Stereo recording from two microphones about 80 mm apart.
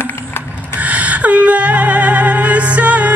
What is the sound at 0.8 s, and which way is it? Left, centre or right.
Music, centre.